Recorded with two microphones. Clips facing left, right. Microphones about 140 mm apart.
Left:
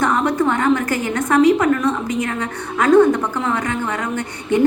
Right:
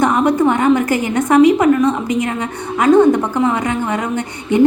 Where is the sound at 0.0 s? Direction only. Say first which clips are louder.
Right 4 dB; 15° right (ahead or behind).